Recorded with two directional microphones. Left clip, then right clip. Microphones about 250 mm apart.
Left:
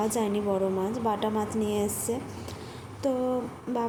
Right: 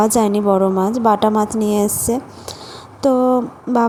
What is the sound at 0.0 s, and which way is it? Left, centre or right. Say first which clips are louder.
A woman's voice: right 13 dB; right.